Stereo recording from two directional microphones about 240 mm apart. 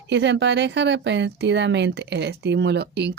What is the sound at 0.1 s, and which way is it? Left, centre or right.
Speech, right.